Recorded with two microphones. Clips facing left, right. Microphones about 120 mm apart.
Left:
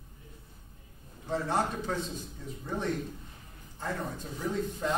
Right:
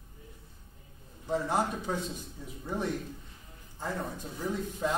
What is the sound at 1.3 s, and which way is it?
Speech, 10° right (ahead or behind).